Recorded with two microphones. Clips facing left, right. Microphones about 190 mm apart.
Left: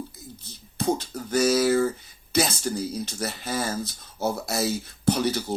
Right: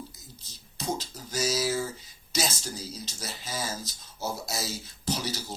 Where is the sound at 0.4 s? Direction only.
60° left (ahead or behind).